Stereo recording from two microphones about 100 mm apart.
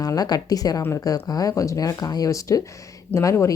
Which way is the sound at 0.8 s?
25° left (ahead or behind).